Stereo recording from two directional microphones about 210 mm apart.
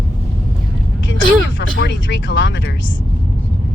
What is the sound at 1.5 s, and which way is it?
Speech, 60° left (ahead or behind).